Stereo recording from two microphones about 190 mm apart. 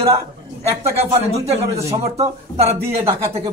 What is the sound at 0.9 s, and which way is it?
A man's voice, 30° right (ahead or behind).